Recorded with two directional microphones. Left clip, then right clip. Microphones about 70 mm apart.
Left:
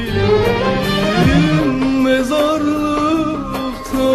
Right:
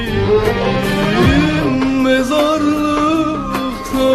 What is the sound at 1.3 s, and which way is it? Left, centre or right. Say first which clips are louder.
Music: right 1 dB; left.